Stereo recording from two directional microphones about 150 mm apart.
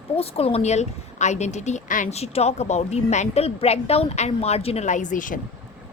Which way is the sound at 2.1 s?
45° left (ahead or behind).